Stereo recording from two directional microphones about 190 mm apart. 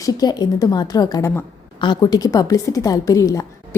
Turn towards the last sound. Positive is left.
turn(degrees=15)  # may be behind; listen again after turning